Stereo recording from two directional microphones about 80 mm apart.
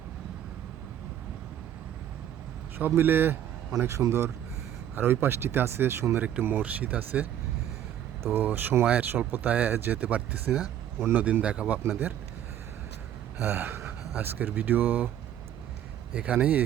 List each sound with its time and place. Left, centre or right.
2.7 s speech: right
3.8 s a man's voice: right
6.4 s speech: centre
11.8 s speech: right
13.4 s gasp: right
14.2 s speech: right
16.1 s speech: centre